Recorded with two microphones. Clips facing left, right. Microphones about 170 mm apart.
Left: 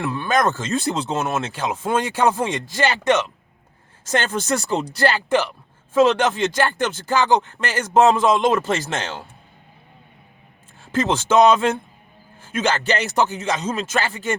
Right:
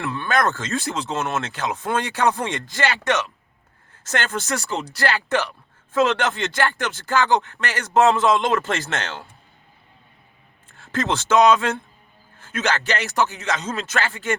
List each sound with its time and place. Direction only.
0.2 s speech: 15° left (ahead or behind)
10.8 s speech: 15° left (ahead or behind)